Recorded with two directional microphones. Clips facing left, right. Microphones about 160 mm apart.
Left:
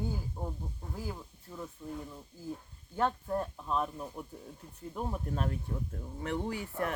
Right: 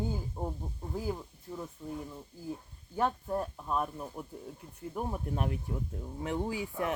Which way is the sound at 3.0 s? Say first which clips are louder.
Even; 10° right (ahead or behind).